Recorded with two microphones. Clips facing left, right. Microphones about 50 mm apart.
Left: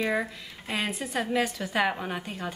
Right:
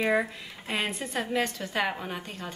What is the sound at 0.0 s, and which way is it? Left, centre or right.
A woman's voice, centre.